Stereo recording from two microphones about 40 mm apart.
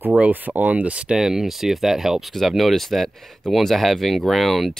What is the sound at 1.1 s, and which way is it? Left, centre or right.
Speech, centre.